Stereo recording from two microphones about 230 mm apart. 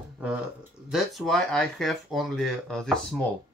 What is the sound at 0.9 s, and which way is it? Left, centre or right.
Speech, centre.